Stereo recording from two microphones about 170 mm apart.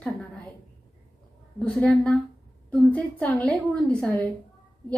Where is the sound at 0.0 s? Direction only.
5° left (ahead or behind).